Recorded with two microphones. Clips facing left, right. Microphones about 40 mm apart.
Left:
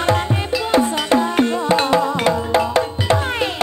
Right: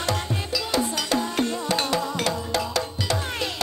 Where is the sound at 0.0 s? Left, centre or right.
Left.